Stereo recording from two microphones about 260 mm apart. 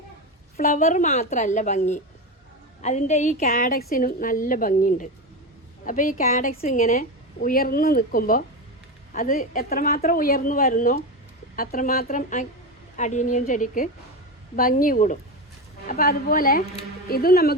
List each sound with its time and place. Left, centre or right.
0.5 s a woman's voice: left